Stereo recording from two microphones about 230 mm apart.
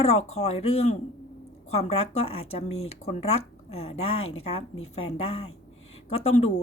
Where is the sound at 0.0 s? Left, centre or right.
Left.